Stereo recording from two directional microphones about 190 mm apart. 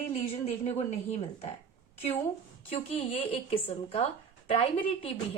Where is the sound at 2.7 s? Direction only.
35° left (ahead or behind).